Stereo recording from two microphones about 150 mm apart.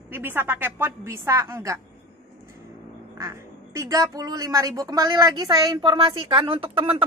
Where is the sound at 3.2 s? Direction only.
20° right (ahead or behind); by 6.9 s 40° right (ahead or behind).